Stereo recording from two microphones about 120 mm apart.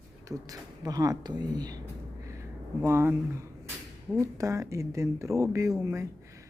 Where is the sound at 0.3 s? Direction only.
30° right (ahead or behind).